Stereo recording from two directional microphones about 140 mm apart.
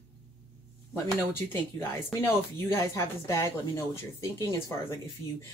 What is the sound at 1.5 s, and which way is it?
Speech, 15° left (ahead or behind).